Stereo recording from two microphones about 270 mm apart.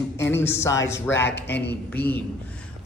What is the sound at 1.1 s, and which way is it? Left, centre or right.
Speech, left.